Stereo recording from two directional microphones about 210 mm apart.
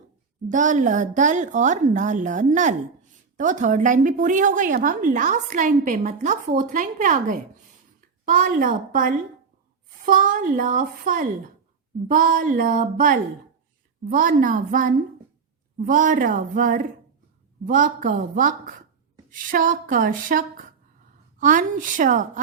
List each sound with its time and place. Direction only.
0.4 s a woman's voice: 35° right (ahead or behind)